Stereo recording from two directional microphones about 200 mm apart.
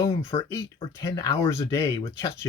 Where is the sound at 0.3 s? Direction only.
25° left (ahead or behind).